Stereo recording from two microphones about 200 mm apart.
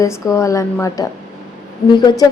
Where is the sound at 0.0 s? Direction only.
15° left (ahead or behind).